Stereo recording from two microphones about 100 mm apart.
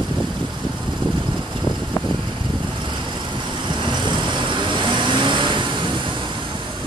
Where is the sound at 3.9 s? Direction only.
50° right (ahead or behind).